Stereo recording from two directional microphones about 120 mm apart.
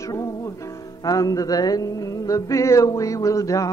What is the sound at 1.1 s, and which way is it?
Music, 30° left (ahead or behind).